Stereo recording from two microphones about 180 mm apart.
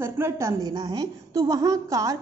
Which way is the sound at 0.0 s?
15° right (ahead or behind).